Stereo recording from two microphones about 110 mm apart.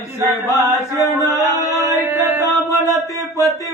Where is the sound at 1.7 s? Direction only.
30° right (ahead or behind).